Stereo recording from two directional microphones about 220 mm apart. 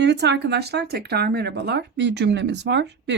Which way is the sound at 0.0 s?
50° right (ahead or behind).